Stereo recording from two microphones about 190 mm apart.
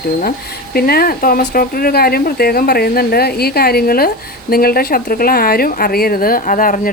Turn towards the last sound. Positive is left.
turn(degrees=45)  # may be behind; listen again after turning